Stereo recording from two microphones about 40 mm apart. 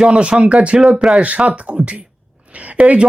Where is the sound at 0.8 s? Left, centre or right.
Centre.